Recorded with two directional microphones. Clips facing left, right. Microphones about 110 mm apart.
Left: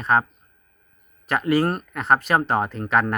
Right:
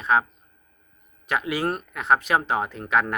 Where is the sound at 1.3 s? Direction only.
Centre (ahead or behind).